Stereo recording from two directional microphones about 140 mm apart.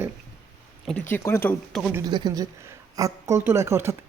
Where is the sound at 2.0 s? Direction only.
30° right (ahead or behind).